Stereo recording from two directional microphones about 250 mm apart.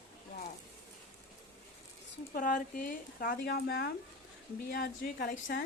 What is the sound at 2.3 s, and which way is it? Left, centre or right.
A woman's voice, left.